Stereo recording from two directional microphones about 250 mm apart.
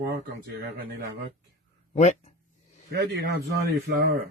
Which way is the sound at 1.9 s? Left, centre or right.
Left.